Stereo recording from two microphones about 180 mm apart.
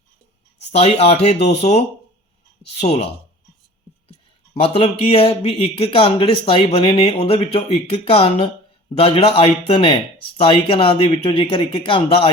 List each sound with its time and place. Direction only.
0.7 s speech: 35° left (ahead or behind)
2.8 s speech: 35° left (ahead or behind)
4.5 s speech: 30° left (ahead or behind)